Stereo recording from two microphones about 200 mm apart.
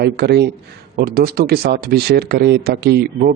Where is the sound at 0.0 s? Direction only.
55° right (ahead or behind).